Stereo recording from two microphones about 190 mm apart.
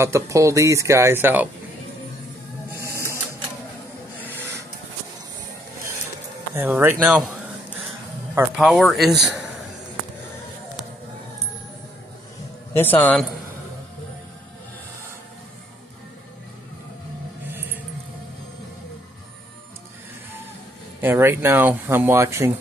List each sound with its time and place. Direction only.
0.0 s speech: 15° right (ahead or behind)
6.5 s speech: 10° right (ahead or behind)
8.4 s speech: centre (ahead or behind)
12.7 s a man's voice: 10° left (ahead or behind)
21.0 s speech: 10° right (ahead or behind)